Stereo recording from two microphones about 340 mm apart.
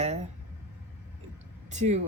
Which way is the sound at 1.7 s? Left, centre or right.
Centre.